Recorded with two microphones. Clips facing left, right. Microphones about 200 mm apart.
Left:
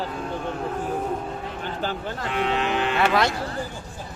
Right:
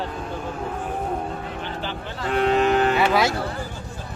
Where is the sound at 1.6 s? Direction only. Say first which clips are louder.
Left 2 dB; 45° left (ahead or behind).